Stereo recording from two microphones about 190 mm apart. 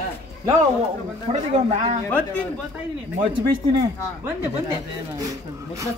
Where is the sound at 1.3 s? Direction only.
35° right (ahead or behind).